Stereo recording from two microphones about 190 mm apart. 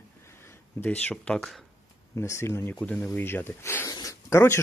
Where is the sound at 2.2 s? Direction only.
15° left (ahead or behind).